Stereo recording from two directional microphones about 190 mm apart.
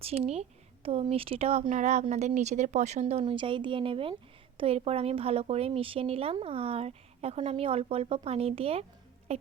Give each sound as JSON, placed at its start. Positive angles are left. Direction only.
{"t": 0.0, "sound": "speech", "side_deg": -30}